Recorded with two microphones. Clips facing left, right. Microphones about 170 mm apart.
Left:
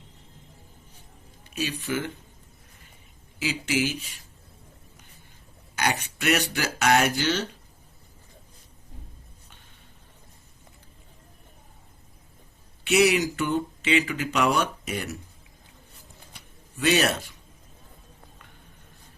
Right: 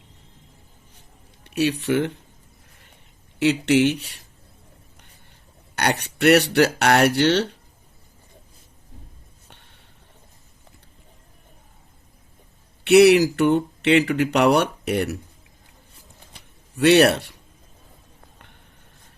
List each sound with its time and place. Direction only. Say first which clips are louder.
1.5 s a sound: right 10 dB; 70° right (ahead or behind)
1.8 s speech: right 8 dB; 65° right (ahead or behind)
3.3 s speech: right 9 dB; 70° right (ahead or behind)
5.7 s speech: right 4 dB; 65° right (ahead or behind)
12.8 s speech: right 9 dB; 65° right (ahead or behind)
16.7 s speech: right 8 dB; 65° right (ahead or behind)